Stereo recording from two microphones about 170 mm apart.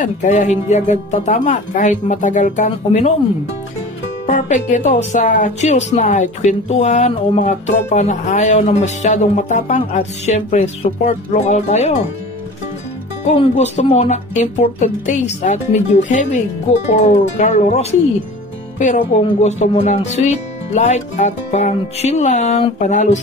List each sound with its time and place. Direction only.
0.0 s speech: 45° left (ahead or behind)
4.3 s speech: 45° left (ahead or behind)
13.2 s speech: 40° left (ahead or behind)